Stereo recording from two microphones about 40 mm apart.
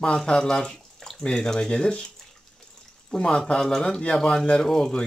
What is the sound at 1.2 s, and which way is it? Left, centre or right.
Speech, centre.